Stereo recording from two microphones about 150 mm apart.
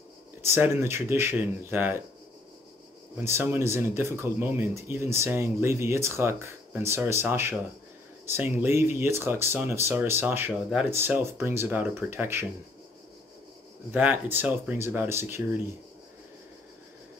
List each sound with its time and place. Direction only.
0.4 s speech: 15° right (ahead or behind)
3.3 s speech: 15° right (ahead or behind)
13.9 s speech: 10° right (ahead or behind)